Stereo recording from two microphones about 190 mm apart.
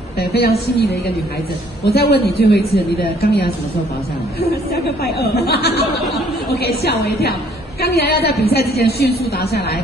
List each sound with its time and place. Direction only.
0.2 s a woman's voice: 55° left (ahead or behind)
1.9 s a woman's voice: 60° left (ahead or behind)
5.0 s a woman's voice: 60° left (ahead or behind)